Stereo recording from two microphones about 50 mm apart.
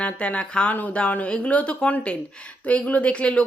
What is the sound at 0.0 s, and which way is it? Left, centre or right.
Speech, left.